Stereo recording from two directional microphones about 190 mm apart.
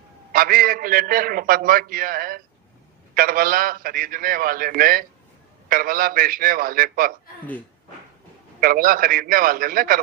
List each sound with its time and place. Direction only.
0.3 s a man's voice: 50° right (ahead or behind)
8.6 s a man's voice: 50° right (ahead or behind)